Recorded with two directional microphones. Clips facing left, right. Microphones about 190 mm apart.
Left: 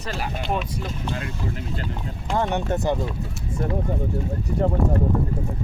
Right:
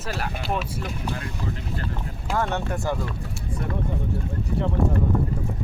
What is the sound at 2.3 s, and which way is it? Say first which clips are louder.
Speech: left 3 dB; 20° left (ahead or behind).